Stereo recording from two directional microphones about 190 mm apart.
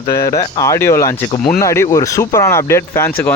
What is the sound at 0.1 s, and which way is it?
Speech, 15° left (ahead or behind).